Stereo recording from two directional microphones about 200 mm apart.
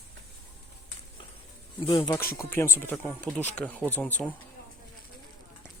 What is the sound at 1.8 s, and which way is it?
Speech, 20° left (ahead or behind).